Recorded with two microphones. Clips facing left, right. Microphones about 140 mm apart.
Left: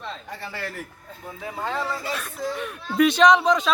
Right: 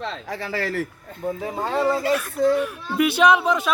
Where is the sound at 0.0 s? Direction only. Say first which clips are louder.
Right 5 dB; 90° right.